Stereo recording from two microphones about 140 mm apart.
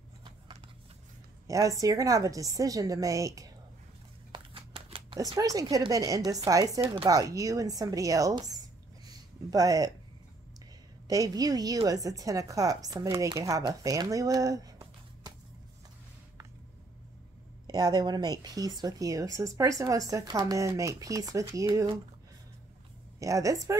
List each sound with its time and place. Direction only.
1.5 s speech: 25° right (ahead or behind)
4.3 s shuffling cards: 40° right (ahead or behind)
5.2 s speech: 25° right (ahead or behind)
11.1 s speech: 25° right (ahead or behind)
17.6 s speech: 30° right (ahead or behind)
23.1 s speech: 25° right (ahead or behind)